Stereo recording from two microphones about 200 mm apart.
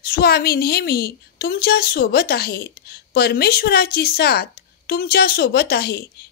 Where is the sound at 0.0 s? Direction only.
50° left (ahead or behind).